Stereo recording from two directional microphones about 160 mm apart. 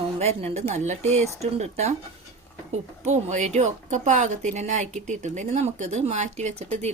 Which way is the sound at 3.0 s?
45° right (ahead or behind).